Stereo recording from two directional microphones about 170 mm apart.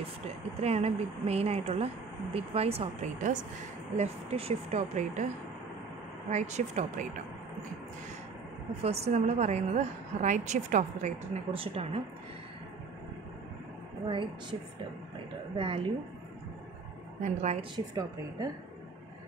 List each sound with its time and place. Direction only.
0.6 s speech: 40° right (ahead or behind)
6.3 s a woman's voice: 40° right (ahead or behind)
8.8 s a woman's voice: 40° right (ahead or behind)
14.0 s a woman's voice: 30° right (ahead or behind)
17.2 s speech: 40° right (ahead or behind)
17.7 s a woman's voice: 20° right (ahead or behind)